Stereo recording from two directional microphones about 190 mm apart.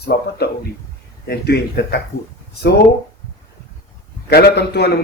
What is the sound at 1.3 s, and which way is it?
Speech, 55° left (ahead or behind).